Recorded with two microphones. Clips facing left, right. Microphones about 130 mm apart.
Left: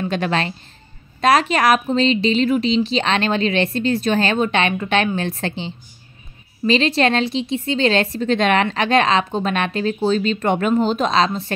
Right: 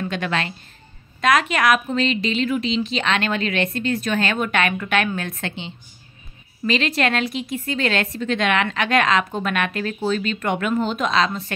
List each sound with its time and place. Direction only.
0.0 s a woman's voice: 35° left (ahead or behind)